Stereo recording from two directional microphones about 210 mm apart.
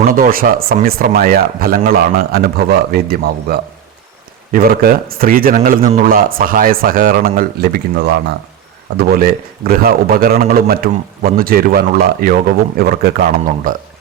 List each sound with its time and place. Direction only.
0.0 s a man's voice: 40° right (ahead or behind)